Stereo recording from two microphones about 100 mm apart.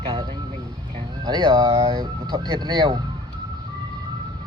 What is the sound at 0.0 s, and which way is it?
Vehicle, 60° right (ahead or behind).